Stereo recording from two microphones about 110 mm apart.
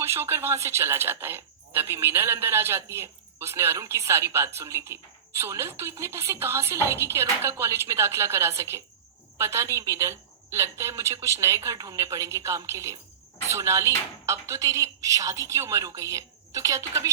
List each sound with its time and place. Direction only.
0.0 s a woman's voice: 25° right (ahead or behind)